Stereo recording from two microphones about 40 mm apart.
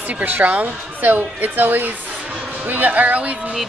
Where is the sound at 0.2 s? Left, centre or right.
Right.